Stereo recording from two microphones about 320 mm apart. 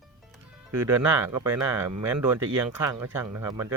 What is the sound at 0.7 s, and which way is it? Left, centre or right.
Speech, centre.